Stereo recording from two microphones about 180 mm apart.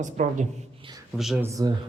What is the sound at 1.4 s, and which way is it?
Speech, 15° right (ahead or behind).